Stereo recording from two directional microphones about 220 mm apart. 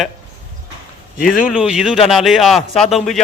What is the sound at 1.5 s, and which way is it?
A man's voice, 5° right (ahead or behind).